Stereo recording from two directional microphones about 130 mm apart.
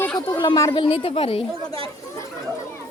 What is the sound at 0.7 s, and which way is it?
Speech, 45° left (ahead or behind).